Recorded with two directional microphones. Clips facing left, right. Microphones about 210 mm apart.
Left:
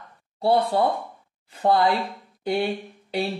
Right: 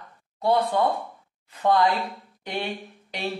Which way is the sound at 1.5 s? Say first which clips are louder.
Left 1 dB; 30° left (ahead or behind).